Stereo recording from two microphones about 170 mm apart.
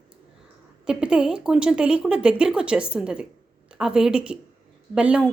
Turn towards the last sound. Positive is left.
turn(degrees=-5)  # may be behind; listen again after turning